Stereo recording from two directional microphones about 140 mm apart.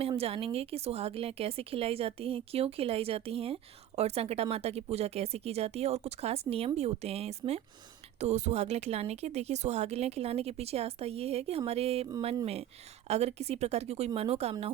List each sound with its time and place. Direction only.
0.2 s speech: 45° right (ahead or behind)
13.1 s speech: 50° right (ahead or behind)